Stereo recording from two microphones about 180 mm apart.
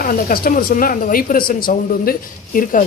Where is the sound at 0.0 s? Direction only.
55° left (ahead or behind).